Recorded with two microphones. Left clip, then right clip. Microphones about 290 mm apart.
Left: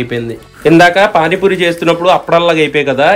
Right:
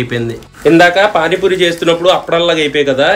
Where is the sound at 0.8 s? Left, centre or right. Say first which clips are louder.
Left 2 dB; left.